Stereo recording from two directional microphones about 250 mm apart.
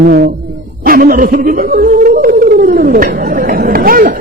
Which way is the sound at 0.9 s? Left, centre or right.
Right.